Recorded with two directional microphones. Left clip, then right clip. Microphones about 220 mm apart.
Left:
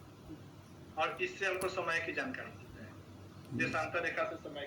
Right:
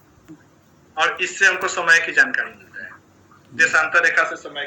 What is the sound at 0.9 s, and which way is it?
A man's voice, 45° right (ahead or behind).